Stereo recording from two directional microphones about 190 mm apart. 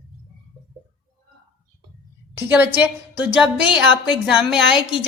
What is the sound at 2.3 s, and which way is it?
A woman's voice, 10° right (ahead or behind).